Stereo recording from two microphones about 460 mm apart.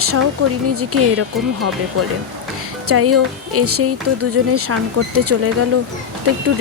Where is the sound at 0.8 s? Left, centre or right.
Right.